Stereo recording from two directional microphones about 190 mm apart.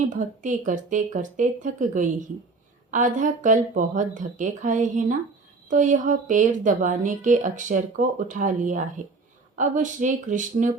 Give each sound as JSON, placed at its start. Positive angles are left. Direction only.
{"t": 0.1, "sound": "a woman's voice", "side_deg": -40}